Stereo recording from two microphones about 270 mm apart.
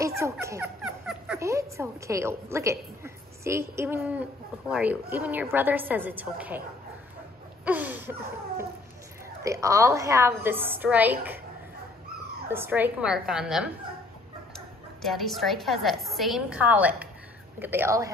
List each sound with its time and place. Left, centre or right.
0.2 s a woman's voice: centre
7.6 s a woman's voice: centre
9.4 s a woman's voice: centre
12.4 s a woman's voice: centre
15.0 s a woman's voice: centre